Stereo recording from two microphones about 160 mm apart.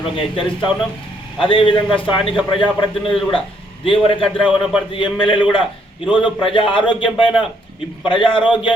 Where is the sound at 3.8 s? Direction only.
35° left (ahead or behind).